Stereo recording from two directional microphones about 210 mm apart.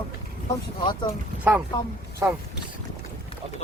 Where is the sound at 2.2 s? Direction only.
15° right (ahead or behind).